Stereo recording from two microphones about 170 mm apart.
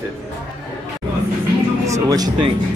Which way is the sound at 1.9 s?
20° right (ahead or behind).